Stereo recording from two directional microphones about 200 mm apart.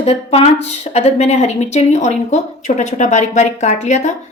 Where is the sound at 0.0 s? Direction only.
30° left (ahead or behind).